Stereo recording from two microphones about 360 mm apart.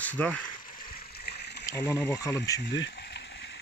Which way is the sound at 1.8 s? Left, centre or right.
Centre.